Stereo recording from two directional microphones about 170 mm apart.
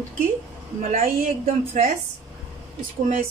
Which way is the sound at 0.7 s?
50° right (ahead or behind).